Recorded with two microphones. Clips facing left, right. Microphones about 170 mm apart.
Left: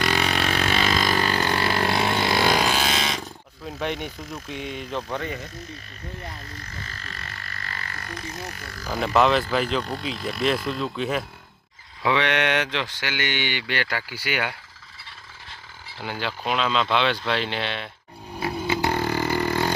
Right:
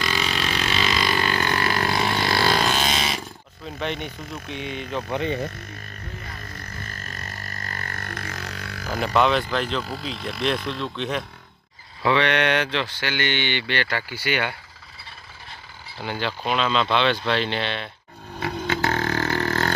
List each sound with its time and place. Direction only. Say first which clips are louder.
0.0 s vehicle: left 3 dB; 65° left (ahead or behind); by 3.2 s centre (ahead or behind)
3.8 s speech: even; 10° left (ahead or behind)
5.1 s speech: right 7 dB; 20° right (ahead or behind)
6.8 s music: right 2 dB; 50° right (ahead or behind); by 8.9 s 70° right (ahead or behind)
8.9 s speech: left 1 dB; centre (ahead or behind)
16.0 s speech: right 2 dB; 5° left (ahead or behind)
18.3 s a sound: left 1 dB; 10° left (ahead or behind)